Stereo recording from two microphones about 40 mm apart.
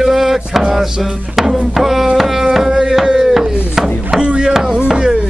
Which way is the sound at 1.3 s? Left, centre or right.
Centre.